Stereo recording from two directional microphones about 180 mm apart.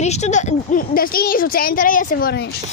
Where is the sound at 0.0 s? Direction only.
40° left (ahead or behind); by 2.5 s 60° left (ahead or behind).